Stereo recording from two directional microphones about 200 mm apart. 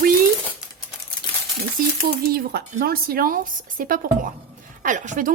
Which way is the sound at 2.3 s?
50° right (ahead or behind).